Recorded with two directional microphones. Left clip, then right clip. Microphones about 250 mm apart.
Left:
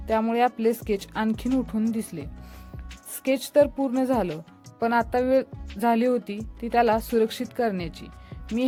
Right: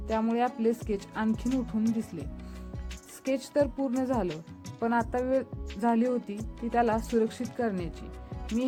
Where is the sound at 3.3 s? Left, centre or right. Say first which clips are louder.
Left 7 dB; left.